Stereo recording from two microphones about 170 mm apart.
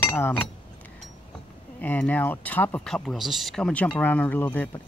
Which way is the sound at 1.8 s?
10° left (ahead or behind).